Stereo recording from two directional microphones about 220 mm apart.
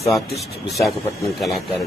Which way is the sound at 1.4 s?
Centre (ahead or behind).